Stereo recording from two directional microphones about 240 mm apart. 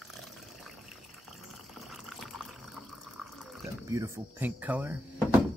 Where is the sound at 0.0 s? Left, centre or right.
Centre.